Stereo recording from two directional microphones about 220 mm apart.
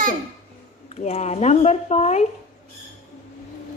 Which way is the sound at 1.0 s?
30° left (ahead or behind).